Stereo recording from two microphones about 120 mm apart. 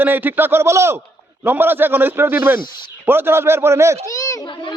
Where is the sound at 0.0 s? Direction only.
15° right (ahead or behind).